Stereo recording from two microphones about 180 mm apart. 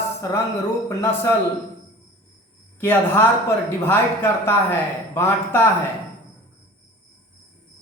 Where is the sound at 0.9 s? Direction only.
15° left (ahead or behind).